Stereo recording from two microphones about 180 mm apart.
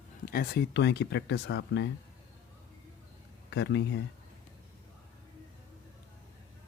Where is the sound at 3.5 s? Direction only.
75° left (ahead or behind).